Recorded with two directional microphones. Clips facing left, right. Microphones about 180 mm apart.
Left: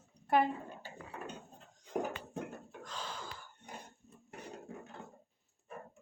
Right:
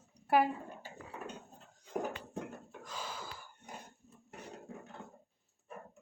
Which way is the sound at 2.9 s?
10° right (ahead or behind).